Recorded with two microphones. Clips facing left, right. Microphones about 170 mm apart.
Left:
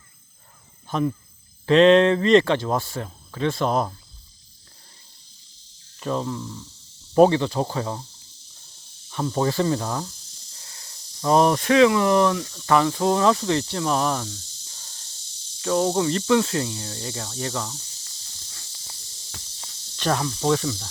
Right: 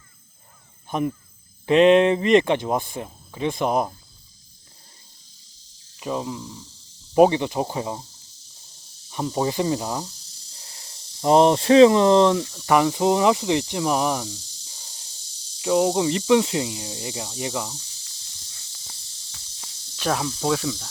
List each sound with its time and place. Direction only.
0.9 s speech: 15° right (ahead or behind)
6.0 s speech: 10° right (ahead or behind)
9.0 s speech: 15° right (ahead or behind)
10.7 s speech: 25° right (ahead or behind)
20.0 s speech: 5° right (ahead or behind)